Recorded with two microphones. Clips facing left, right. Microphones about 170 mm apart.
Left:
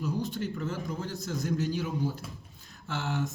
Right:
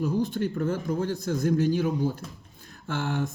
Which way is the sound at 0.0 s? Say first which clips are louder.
Right 6 dB; 50° right (ahead or behind).